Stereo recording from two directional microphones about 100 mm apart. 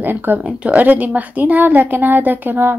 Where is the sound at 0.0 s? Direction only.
20° right (ahead or behind).